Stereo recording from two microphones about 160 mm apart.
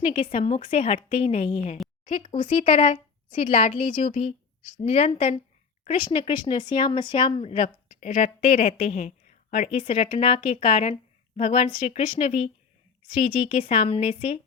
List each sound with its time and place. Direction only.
0.1 s speech: 30° left (ahead or behind); by 9.7 s 50° left (ahead or behind)
9.7 s speech: 35° left (ahead or behind)
13.6 s speech: 35° left (ahead or behind)